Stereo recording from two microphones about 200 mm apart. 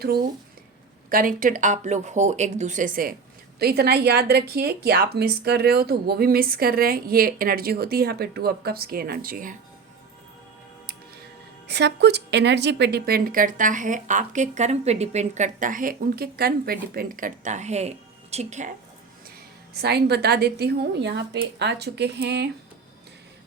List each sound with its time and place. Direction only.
1.1 s a woman's voice: 45° right (ahead or behind)
11.7 s speech: 60° right (ahead or behind); by 18.7 s 35° right (ahead or behind)
19.8 s a woman's voice: 55° right (ahead or behind)